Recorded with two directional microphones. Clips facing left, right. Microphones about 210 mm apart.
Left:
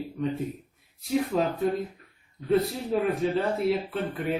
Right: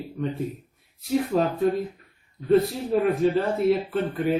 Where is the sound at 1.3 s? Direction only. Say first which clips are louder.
Right 4 dB; 5° right (ahead or behind).